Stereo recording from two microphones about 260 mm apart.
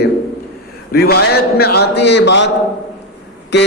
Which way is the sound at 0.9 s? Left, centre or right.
Left.